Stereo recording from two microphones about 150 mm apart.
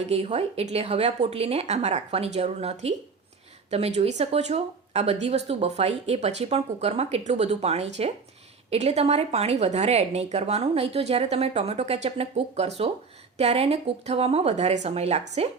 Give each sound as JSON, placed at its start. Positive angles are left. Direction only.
{"t": 0.0, "sound": "speech", "side_deg": -45}